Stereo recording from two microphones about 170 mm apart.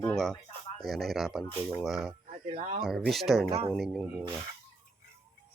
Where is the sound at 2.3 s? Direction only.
35° right (ahead or behind).